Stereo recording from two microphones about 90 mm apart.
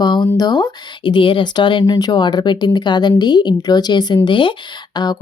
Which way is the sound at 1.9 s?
50° left (ahead or behind).